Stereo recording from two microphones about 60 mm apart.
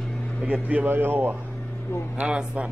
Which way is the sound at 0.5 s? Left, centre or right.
Right.